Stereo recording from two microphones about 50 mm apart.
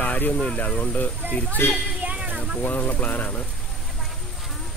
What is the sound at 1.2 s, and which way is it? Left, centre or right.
Speech, right.